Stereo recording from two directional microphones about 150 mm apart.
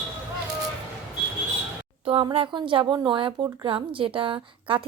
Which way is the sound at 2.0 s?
35° right (ahead or behind).